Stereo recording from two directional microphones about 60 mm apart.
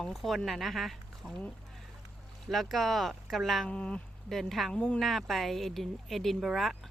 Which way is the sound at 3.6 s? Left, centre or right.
Centre.